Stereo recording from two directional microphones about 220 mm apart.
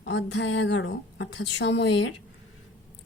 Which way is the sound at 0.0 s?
55° left (ahead or behind).